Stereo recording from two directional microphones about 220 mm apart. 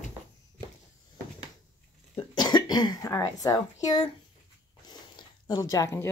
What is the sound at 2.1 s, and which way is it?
A child's voice, 20° left (ahead or behind).